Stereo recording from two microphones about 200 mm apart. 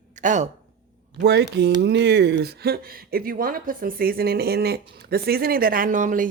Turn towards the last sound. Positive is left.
turn(degrees=-40)  # may be behind; listen again after turning